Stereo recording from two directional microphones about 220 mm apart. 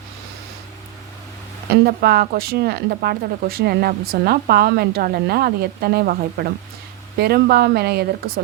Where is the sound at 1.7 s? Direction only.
45° right (ahead or behind).